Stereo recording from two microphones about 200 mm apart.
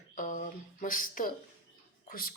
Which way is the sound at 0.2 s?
40° left (ahead or behind).